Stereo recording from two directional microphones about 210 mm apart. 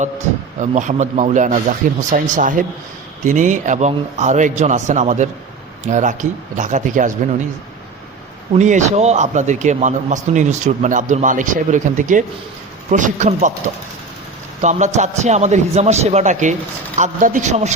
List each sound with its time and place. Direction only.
0.6 s speech: 35° right (ahead or behind)
8.5 s speech: 35° right (ahead or behind)
14.6 s speech: 35° right (ahead or behind)